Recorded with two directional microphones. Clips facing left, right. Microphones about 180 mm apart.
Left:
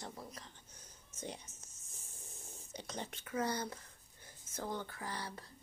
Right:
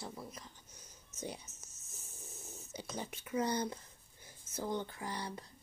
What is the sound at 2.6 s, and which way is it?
Speech, 5° right (ahead or behind).